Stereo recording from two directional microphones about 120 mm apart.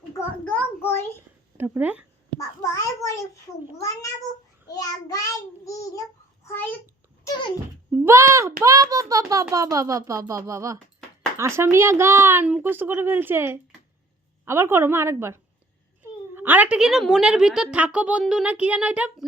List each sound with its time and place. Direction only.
0.8 s a sound: 20° left (ahead or behind)
1.5 s speech: 15° right (ahead or behind)
2.6 s a sound: 25° left (ahead or behind)
3.8 s cat: 30° left (ahead or behind)
4.7 s child singing: 30° left (ahead or behind)
6.5 s a child's voice: 15° left (ahead or behind)
8.0 s a child's voice: 25° right (ahead or behind)